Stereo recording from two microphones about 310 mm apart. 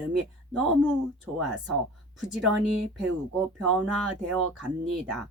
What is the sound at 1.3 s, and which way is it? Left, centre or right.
Speech, right.